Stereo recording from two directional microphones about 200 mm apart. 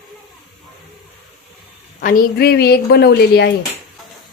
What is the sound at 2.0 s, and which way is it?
A woman's voice, 45° left (ahead or behind).